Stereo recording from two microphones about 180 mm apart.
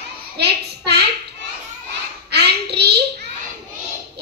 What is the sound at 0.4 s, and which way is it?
Child singing, 65° right (ahead or behind).